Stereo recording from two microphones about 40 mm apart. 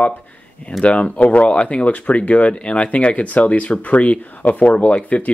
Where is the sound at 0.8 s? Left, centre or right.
Left.